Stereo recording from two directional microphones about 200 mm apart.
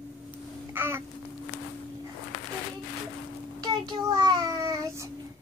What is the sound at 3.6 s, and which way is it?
Child singing, 20° right (ahead or behind).